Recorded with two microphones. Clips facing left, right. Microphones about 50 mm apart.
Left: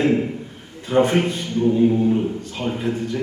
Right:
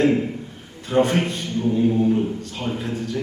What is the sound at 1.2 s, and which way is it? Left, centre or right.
Speech, centre.